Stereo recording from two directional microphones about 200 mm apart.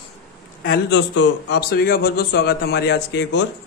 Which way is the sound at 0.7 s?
65° left (ahead or behind).